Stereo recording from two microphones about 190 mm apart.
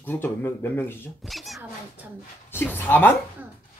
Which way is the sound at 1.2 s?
Centre (ahead or behind).